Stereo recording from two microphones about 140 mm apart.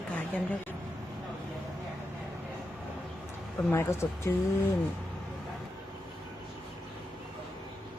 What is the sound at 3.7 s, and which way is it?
Speech, 20° left (ahead or behind).